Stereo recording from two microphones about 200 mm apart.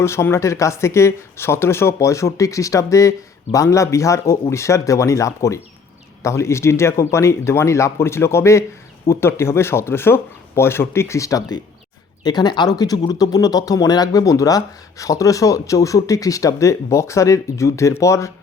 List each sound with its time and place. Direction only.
0.0 s speech: 15° left (ahead or behind)